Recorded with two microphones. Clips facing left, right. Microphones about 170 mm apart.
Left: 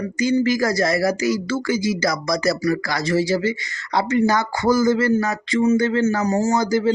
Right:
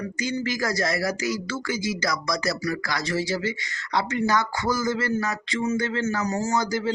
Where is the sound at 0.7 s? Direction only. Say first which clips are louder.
Left 6 dB; 5° left (ahead or behind).